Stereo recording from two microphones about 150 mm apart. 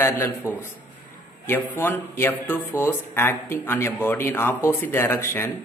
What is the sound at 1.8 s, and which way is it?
Speech, 15° left (ahead or behind).